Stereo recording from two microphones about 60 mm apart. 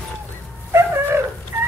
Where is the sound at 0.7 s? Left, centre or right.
Right.